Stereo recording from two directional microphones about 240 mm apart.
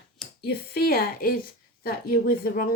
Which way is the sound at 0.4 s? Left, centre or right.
Left.